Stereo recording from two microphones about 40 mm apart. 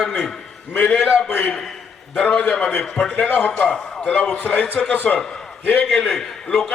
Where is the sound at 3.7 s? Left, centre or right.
Centre.